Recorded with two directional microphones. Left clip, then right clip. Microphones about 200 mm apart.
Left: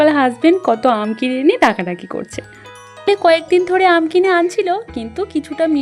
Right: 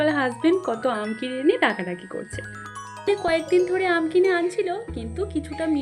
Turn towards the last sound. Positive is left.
turn(degrees=45)  # may be behind; listen again after turning